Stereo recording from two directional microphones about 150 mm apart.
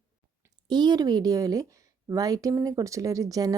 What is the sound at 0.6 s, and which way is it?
Speech, 30° right (ahead or behind).